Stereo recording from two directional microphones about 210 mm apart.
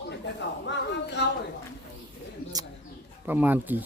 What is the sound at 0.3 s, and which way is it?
Speech, 55° left (ahead or behind).